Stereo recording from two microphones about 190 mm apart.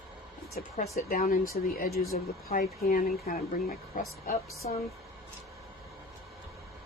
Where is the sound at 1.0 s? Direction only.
50° left (ahead or behind).